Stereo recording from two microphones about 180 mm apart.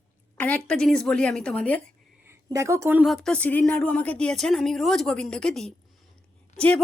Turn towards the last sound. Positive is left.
turn(degrees=5)  # may be behind; listen again after turning